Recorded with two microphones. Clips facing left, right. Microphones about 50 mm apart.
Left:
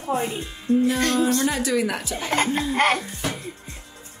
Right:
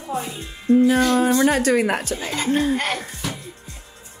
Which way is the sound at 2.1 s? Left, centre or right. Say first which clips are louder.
Left 1 dB; left.